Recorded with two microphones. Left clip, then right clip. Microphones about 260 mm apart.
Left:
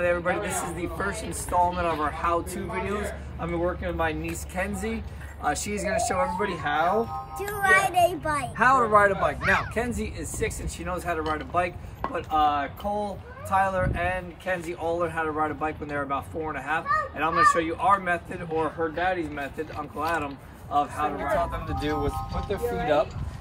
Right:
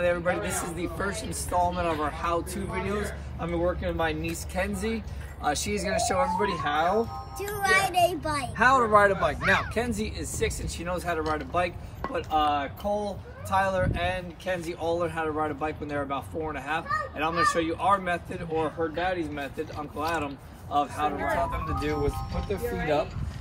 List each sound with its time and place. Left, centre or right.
0.0 s speech: centre
0.4 s a man's voice: left
0.9 s speech: centre